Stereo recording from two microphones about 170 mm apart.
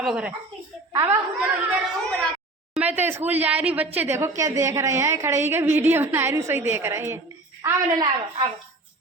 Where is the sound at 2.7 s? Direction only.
10° right (ahead or behind).